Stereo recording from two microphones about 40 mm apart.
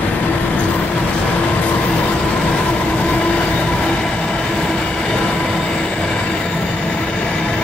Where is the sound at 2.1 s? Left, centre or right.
Left.